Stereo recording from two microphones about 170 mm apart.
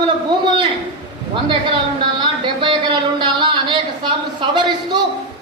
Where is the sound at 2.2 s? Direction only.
30° right (ahead or behind).